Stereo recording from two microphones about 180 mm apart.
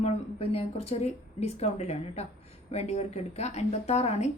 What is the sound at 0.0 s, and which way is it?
Speech, 35° left (ahead or behind).